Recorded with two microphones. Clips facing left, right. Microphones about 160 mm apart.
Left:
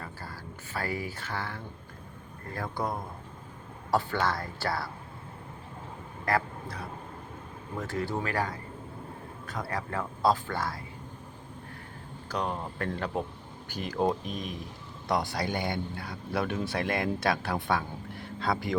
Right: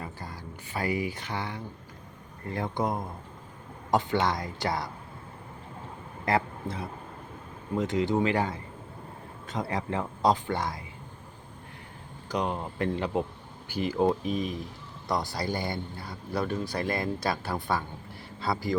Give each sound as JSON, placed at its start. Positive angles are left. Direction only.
{"t": 0.0, "sound": "speech", "side_deg": -15}
{"t": 6.2, "sound": "speech", "side_deg": -25}
{"t": 12.3, "sound": "speech", "side_deg": -10}